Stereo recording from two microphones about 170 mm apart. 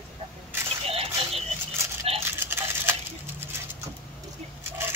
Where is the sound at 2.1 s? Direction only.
35° right (ahead or behind).